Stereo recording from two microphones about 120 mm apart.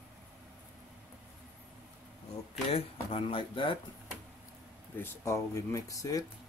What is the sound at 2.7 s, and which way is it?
Speech, 50° left (ahead or behind).